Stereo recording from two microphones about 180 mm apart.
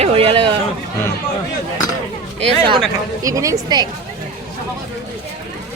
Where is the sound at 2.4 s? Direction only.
30° right (ahead or behind).